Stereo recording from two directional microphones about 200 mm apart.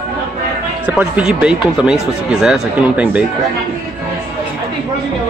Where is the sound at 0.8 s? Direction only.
5° right (ahead or behind).